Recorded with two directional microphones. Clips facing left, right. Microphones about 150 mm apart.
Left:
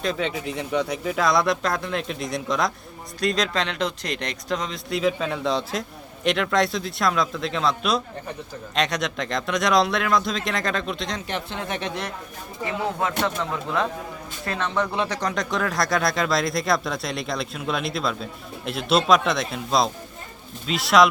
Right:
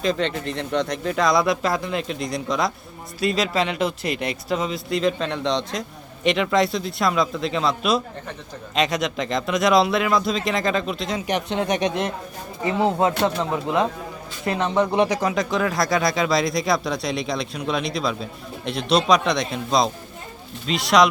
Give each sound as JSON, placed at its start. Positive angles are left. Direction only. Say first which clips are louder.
{"t": 0.0, "sound": "speech", "louder": "right 3 dB", "side_deg": 5}
{"t": 11.3, "sound": "speech", "louder": "right 7 dB", "side_deg": -20}